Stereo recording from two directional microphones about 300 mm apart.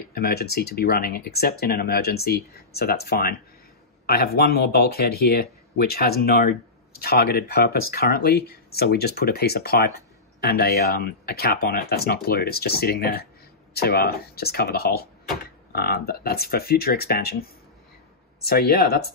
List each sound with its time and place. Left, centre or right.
0.1 s speech: left